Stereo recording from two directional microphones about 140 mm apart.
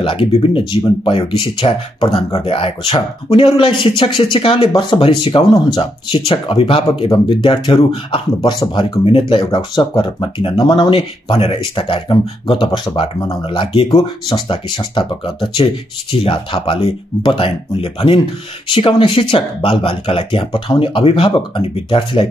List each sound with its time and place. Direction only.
0.0 s speech: 40° left (ahead or behind)